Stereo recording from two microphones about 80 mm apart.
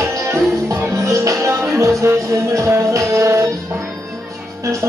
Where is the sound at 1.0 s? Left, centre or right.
Right.